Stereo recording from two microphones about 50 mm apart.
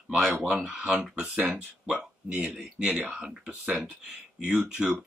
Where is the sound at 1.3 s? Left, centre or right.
Right.